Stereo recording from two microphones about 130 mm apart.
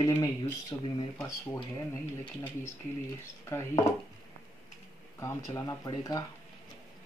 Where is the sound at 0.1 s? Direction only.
30° left (ahead or behind).